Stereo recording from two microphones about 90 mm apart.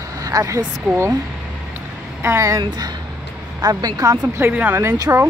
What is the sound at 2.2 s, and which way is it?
Speech, 35° right (ahead or behind).